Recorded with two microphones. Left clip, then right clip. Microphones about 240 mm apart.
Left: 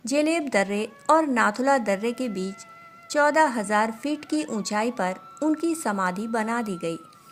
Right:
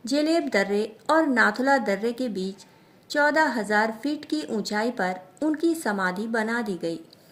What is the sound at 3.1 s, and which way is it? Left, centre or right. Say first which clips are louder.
Speech: left 1 dB; left.